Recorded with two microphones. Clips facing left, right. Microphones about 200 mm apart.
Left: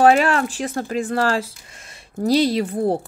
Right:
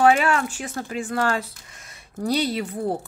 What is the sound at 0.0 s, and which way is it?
A woman's voice, 35° left (ahead or behind).